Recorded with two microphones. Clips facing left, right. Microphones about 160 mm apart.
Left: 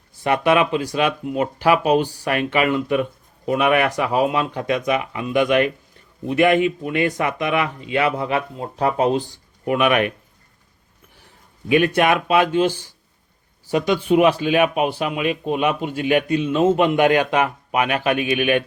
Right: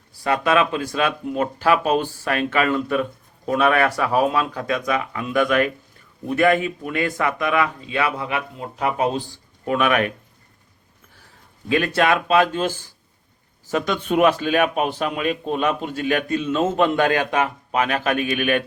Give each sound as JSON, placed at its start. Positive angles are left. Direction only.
{"t": 0.2, "sound": "speech", "side_deg": 20}
{"t": 9.6, "sound": "speech", "side_deg": 15}
{"t": 11.7, "sound": "speech", "side_deg": 15}
{"t": 17.8, "sound": "a man's voice", "side_deg": -40}